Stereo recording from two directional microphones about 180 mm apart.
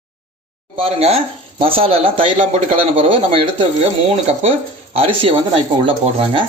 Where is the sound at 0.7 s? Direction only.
35° right (ahead or behind).